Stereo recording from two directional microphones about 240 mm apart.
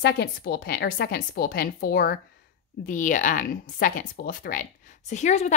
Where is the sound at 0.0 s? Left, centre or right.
Left.